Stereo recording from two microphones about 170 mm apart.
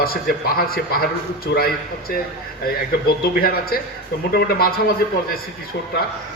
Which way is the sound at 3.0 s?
60° left (ahead or behind).